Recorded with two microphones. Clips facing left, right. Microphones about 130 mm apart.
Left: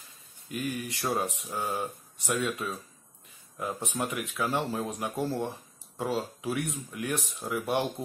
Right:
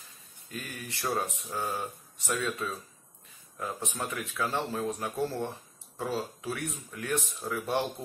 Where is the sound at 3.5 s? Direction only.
15° left (ahead or behind).